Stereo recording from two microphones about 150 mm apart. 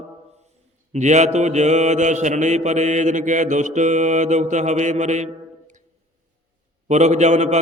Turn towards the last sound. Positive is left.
turn(degrees=-50)  # may be behind; listen again after turning